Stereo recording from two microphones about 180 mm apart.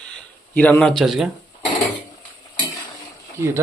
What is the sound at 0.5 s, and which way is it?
Speech, 10° left (ahead or behind).